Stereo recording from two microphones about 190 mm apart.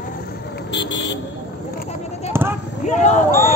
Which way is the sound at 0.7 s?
70° left (ahead or behind).